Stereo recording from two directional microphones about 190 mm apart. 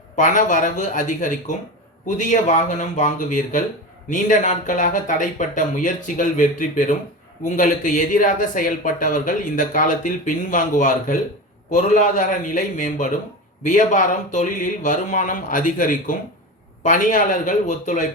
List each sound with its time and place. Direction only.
0.2 s speech: 40° left (ahead or behind)